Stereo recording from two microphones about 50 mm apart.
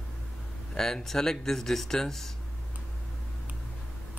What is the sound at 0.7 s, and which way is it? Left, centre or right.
Speech, centre.